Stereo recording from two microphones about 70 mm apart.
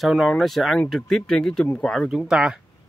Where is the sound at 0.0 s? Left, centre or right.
Centre.